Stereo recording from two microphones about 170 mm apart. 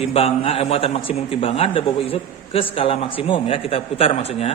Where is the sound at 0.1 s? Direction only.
35° left (ahead or behind).